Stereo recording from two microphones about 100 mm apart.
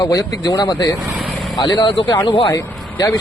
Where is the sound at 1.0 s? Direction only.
Centre (ahead or behind).